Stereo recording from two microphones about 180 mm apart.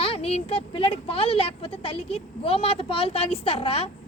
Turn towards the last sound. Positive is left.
turn(degrees=35)  # may be behind; listen again after turning